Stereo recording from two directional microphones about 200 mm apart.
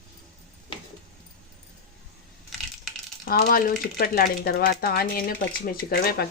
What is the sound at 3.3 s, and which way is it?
Speech, 45° left (ahead or behind).